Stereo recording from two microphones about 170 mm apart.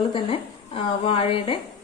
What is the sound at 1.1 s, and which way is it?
Speech, 35° left (ahead or behind).